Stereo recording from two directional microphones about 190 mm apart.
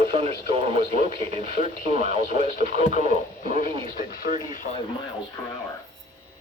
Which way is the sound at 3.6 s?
45° left (ahead or behind).